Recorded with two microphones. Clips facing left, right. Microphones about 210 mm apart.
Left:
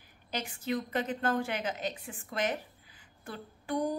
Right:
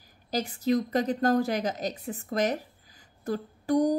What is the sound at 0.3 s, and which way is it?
A woman's voice, 35° right (ahead or behind).